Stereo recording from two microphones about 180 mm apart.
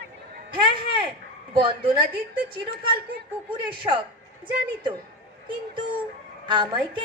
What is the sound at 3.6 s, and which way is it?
Speech, 25° right (ahead or behind).